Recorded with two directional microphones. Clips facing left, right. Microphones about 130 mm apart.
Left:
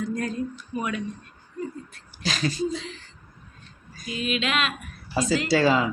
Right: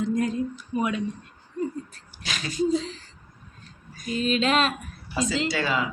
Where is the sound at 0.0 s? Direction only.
20° right (ahead or behind).